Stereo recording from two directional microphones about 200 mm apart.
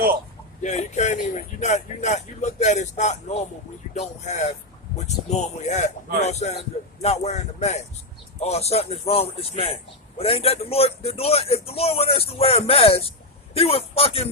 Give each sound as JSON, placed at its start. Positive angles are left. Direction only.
{"t": 0.6, "sound": "a man's voice", "side_deg": 35}